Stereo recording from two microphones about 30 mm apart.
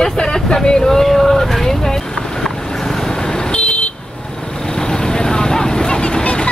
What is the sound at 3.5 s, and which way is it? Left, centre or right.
Vehicle, left.